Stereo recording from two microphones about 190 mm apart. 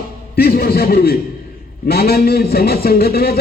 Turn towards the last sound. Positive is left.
turn(degrees=55)  # may be behind; listen again after turning